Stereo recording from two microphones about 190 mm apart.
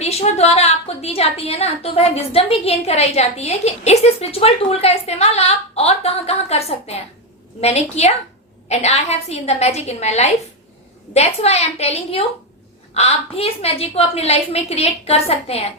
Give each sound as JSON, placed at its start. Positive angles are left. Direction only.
{"t": 0.0, "sound": "a woman's voice", "side_deg": 35}